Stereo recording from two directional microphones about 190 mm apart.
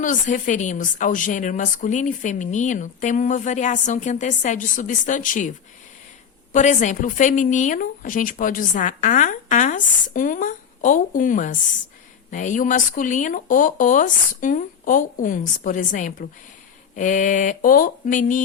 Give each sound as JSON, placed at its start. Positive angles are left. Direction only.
{"t": 0.0, "sound": "a woman's voice", "side_deg": 45}
{"t": 6.5, "sound": "a woman's voice", "side_deg": 40}